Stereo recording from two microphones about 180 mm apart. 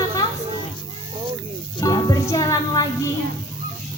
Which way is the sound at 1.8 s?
20° left (ahead or behind).